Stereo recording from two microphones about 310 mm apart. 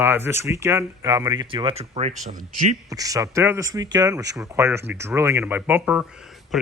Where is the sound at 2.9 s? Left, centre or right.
Centre.